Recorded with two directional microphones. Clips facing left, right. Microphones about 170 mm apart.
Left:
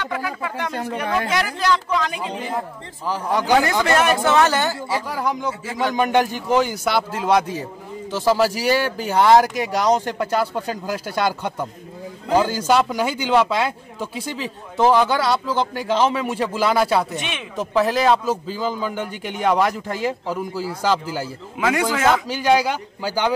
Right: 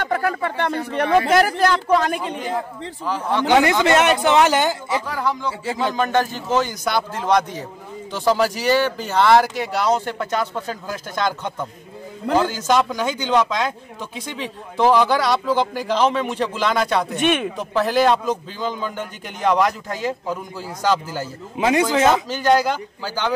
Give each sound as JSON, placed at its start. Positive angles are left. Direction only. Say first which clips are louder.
{"t": 0.0, "sound": "speech", "louder": "right 5 dB", "side_deg": -50}
{"t": 3.1, "sound": "speech", "louder": "even", "side_deg": 10}
{"t": 3.8, "sound": "speech", "louder": "right 2 dB", "side_deg": -20}
{"t": 5.1, "sound": "speech", "louder": "even", "side_deg": 15}
{"t": 17.2, "sound": "speech", "louder": "right 11 dB", "side_deg": -55}
{"t": 17.6, "sound": "a man's voice", "louder": "even", "side_deg": 0}
{"t": 21.5, "sound": "a man's voice", "louder": "right 3 dB", "side_deg": -25}
{"t": 22.3, "sound": "speech", "louder": "right 1 dB", "side_deg": 10}